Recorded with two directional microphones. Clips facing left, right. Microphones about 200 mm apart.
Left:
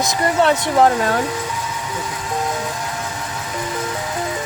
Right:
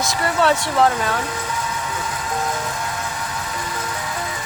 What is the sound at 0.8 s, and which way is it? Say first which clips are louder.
Speech: left 5 dB; 35° left (ahead or behind).